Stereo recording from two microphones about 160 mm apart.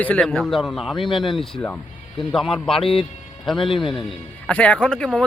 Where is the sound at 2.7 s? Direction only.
35° left (ahead or behind).